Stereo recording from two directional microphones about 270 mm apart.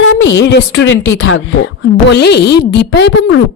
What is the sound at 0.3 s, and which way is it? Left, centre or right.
A woman's voice, left.